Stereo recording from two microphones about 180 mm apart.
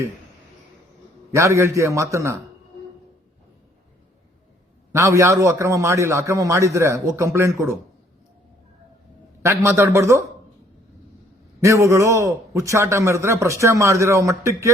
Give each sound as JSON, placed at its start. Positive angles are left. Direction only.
{"t": 1.3, "sound": "a man's voice", "side_deg": -15}
{"t": 4.9, "sound": "a man's voice", "side_deg": -15}
{"t": 9.4, "sound": "a man's voice", "side_deg": -15}
{"t": 11.6, "sound": "a man's voice", "side_deg": -15}